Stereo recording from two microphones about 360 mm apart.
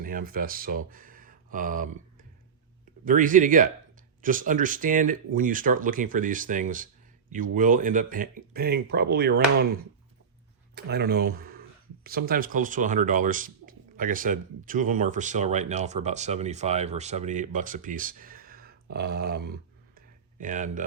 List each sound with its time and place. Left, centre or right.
0.0 s speech: right
10.8 s speech: right